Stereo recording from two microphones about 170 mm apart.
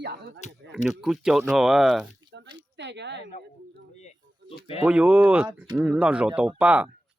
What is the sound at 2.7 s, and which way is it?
Speech, 90° right.